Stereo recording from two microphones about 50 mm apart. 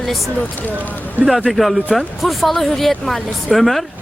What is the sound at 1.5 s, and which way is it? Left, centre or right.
Speech, centre.